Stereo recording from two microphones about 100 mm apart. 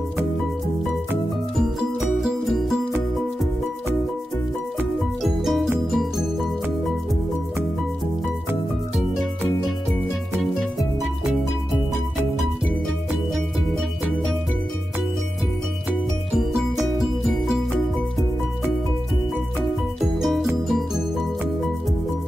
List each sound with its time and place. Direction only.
2.0 s music: 5° right (ahead or behind)
5.2 s music: centre (ahead or behind)
20.2 s music: centre (ahead or behind)